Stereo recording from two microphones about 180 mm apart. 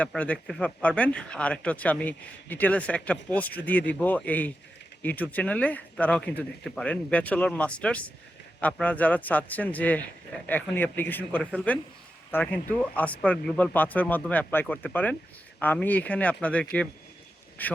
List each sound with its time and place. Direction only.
0.0 s speech: 10° left (ahead or behind)